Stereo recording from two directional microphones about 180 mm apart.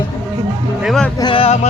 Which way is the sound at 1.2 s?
30° left (ahead or behind).